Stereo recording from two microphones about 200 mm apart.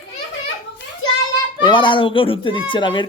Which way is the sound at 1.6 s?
25° left (ahead or behind).